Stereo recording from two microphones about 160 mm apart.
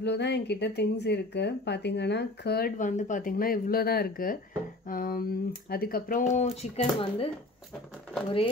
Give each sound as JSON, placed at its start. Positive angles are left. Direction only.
{"t": 0.0, "sound": "speech", "side_deg": 90}
{"t": 2.8, "sound": "speech", "side_deg": 50}
{"t": 6.3, "sound": "speech", "side_deg": 40}